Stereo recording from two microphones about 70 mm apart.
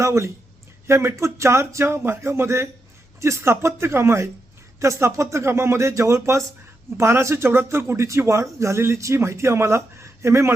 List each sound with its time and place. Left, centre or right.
0.0 s speech: right